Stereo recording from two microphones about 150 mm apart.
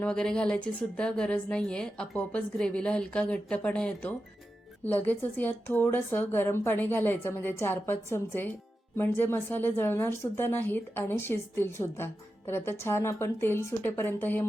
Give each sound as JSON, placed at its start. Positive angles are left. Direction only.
{"t": 0.0, "sound": "a woman's voice", "side_deg": 5}